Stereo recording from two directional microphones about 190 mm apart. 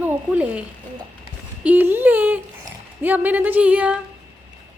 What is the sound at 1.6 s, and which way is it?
Speech, 10° right (ahead or behind).